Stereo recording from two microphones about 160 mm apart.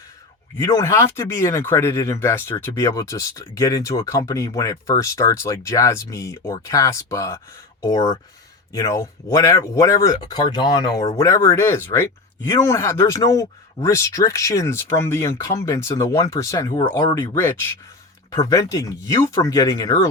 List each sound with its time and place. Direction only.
0.6 s speech: 20° left (ahead or behind)
17.3 s speech: 15° left (ahead or behind)